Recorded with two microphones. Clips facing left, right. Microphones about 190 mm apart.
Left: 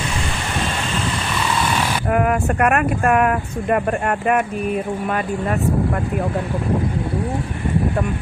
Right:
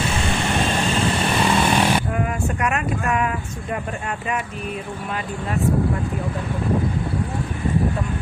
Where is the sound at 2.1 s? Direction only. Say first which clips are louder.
Left 6 dB; 60° left (ahead or behind).